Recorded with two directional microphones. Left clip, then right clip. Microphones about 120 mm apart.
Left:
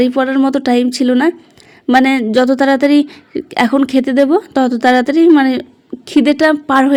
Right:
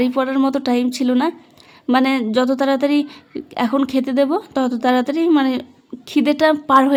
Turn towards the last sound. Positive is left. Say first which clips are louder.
# left 2 dB
turn(degrees=20)  # may be behind; listen again after turning